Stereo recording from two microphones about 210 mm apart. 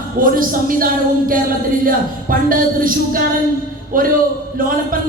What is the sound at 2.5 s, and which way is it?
A man's voice, 40° right (ahead or behind).